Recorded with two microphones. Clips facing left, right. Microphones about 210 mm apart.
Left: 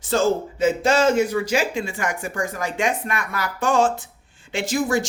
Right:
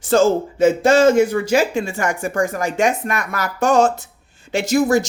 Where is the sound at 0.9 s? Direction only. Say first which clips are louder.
Right 5 dB; 50° right (ahead or behind).